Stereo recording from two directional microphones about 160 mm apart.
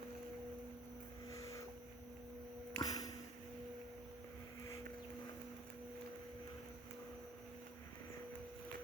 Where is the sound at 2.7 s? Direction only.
25° left (ahead or behind).